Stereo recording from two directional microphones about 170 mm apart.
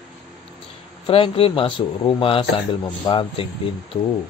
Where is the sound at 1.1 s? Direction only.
35° left (ahead or behind).